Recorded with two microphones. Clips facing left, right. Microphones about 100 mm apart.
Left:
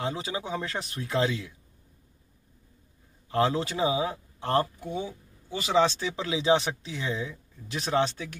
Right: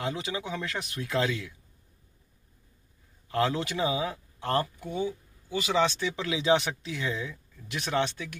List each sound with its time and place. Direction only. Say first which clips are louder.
0.0 s speech: left 1 dB; 30° left (ahead or behind)
3.3 s speech: left 2 dB; 30° left (ahead or behind)